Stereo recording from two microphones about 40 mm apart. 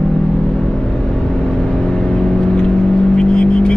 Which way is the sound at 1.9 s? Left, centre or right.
Centre.